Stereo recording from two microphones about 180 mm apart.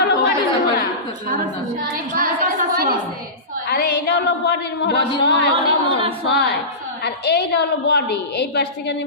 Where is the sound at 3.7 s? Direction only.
60° left (ahead or behind).